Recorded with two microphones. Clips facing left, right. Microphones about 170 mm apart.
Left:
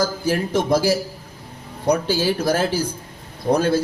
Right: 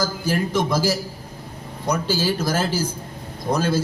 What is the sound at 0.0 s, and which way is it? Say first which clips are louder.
Speech: left 2 dB; 60° left (ahead or behind).